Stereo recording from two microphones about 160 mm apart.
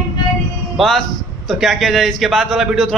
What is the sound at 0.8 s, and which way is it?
A man's voice, centre (ahead or behind).